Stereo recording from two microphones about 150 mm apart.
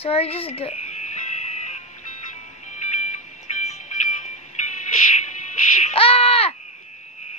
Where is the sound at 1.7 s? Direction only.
50° left (ahead or behind).